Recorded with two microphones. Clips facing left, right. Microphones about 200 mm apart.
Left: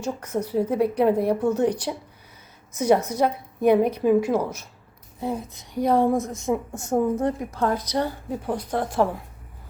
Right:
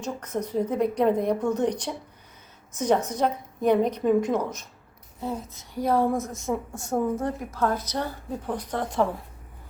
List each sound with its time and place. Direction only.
0.0 s a woman's voice: 10° left (ahead or behind)